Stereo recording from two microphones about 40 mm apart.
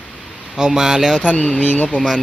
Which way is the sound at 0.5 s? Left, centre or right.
Centre.